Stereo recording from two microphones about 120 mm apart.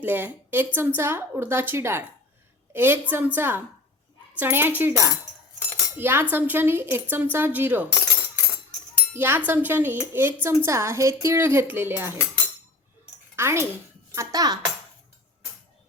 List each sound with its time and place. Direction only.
0.0 s a woman's voice: 15° right (ahead or behind)
4.8 s dishes: 20° right (ahead or behind)
6.0 s a woman's voice: 15° right (ahead or behind)
9.1 s a woman's voice: 15° right (ahead or behind)
10.4 s dishes: 20° right (ahead or behind)
13.3 s speech: 20° right (ahead or behind)
14.2 s speech: 30° right (ahead or behind)